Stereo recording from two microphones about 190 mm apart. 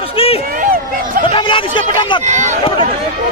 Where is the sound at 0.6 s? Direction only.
45° right (ahead or behind).